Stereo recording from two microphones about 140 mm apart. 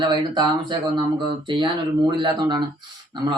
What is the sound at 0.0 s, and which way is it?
Speech, 30° right (ahead or behind).